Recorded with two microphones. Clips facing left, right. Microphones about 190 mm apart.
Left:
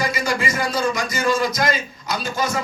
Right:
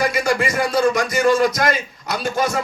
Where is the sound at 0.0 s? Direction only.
60° right (ahead or behind).